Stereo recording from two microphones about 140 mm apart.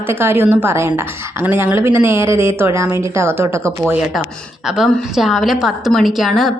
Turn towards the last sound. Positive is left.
turn(degrees=0)  # may be behind; listen again after turning